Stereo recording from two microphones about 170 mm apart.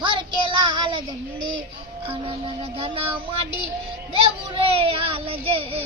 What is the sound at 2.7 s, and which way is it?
Speech, 30° right (ahead or behind).